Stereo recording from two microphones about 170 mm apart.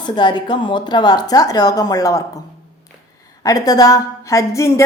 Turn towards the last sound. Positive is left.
turn(degrees=15)  # may be behind; listen again after turning